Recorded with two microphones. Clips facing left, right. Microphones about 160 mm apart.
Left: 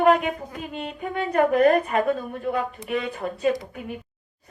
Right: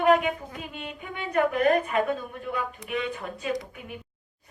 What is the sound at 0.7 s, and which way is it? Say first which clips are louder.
Speech: left 8 dB; 40° left (ahead or behind).